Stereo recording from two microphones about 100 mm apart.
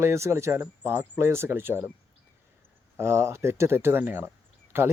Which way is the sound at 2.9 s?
30° right (ahead or behind).